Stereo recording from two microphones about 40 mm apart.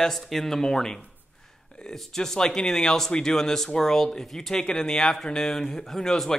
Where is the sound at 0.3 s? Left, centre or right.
Centre.